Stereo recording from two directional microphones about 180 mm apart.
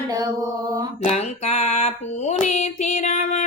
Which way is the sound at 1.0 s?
35° left (ahead or behind).